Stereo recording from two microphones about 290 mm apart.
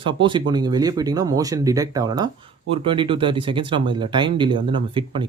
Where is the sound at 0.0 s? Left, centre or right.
Centre.